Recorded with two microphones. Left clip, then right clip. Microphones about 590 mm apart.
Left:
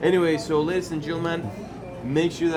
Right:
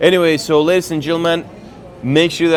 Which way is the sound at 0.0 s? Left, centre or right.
Right.